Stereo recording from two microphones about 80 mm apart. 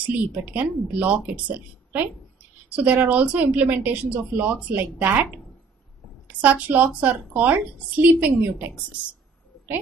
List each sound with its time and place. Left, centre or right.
0.0 s a woman's voice: centre
2.7 s a woman's voice: centre